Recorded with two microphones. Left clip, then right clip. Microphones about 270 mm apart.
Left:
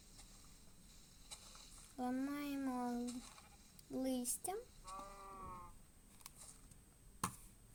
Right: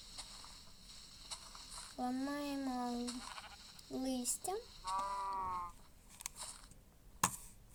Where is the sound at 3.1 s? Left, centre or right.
Right.